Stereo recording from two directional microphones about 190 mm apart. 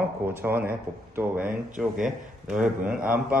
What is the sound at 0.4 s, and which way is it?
A man's voice, 10° right (ahead or behind).